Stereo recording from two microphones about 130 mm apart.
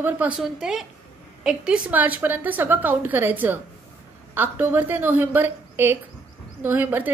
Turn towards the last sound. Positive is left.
turn(degrees=-15)  # may be behind; listen again after turning